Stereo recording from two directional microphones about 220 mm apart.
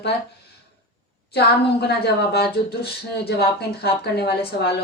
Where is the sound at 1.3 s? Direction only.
45° left (ahead or behind).